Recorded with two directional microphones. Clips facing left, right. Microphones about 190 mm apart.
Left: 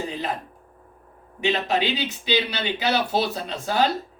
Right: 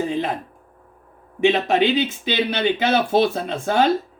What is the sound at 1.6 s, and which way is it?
Speech, 50° right (ahead or behind).